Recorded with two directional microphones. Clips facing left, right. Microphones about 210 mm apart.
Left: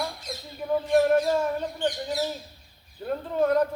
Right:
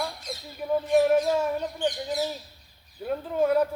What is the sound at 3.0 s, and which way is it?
Speech, 5° right (ahead or behind).